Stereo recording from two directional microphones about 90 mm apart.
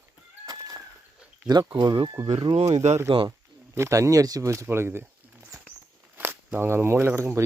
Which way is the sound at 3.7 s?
35° right (ahead or behind).